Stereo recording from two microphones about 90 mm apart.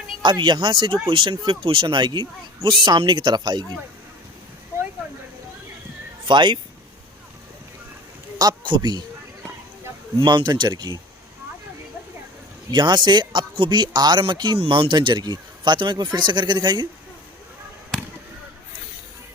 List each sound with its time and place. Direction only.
0.2 s a man's voice: 60° right (ahead or behind)
6.2 s speech: 65° right (ahead or behind)
8.4 s a man's voice: 50° right (ahead or behind)
10.2 s a man's voice: 60° right (ahead or behind)
12.7 s a man's voice: 55° right (ahead or behind); by 14.9 s 75° right (ahead or behind)
14.9 s a man's voice: 55° right (ahead or behind)